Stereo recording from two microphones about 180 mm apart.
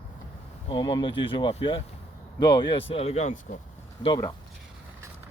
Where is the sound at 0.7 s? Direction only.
25° left (ahead or behind).